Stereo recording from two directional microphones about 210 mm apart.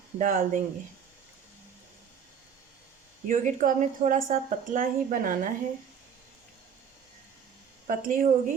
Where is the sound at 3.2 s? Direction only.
35° right (ahead or behind).